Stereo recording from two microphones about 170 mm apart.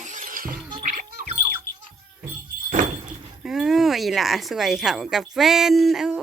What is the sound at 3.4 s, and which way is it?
Speech, 5° right (ahead or behind).